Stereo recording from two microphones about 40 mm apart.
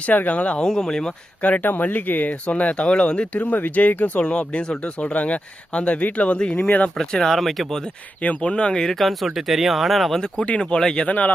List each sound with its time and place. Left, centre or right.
0.3 s speech: left
0.6 s speech: centre
1.4 s speech: left
3.3 s speech: left
4.2 s speech: left
7.0 s speech: centre
8.4 s speech: left
8.8 s speech: centre
9.0 s speech: centre
10.3 s speech: left
10.6 s speech: centre